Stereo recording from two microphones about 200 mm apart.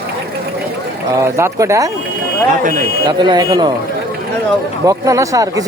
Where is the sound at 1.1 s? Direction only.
15° right (ahead or behind).